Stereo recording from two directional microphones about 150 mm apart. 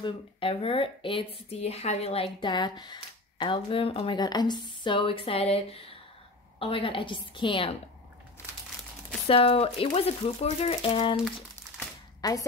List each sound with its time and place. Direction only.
0.0 s a woman's voice: 40° left (ahead or behind)
9.3 s a woman's voice: 40° left (ahead or behind)
12.2 s a woman's voice: 25° left (ahead or behind)